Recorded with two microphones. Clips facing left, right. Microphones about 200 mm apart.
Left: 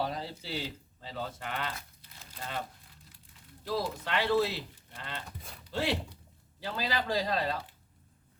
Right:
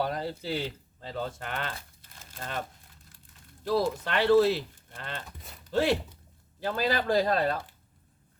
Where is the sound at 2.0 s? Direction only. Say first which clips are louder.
Right 2 dB; 50° right (ahead or behind).